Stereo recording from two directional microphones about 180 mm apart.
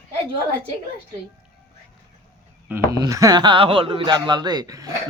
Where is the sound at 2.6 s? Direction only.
10° right (ahead or behind).